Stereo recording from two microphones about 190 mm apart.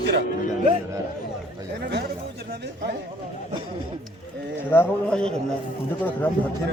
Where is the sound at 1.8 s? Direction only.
60° right (ahead or behind).